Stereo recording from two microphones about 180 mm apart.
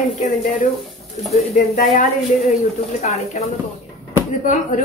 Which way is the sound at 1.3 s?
40° left (ahead or behind).